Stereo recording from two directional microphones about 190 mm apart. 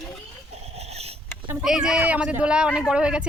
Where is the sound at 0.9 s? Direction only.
35° right (ahead or behind).